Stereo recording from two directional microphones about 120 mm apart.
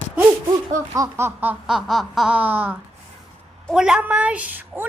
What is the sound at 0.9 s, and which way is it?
Baby laughter, 25° right (ahead or behind).